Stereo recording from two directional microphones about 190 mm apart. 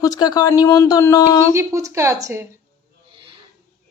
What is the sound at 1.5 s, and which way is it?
Speech, 15° right (ahead or behind).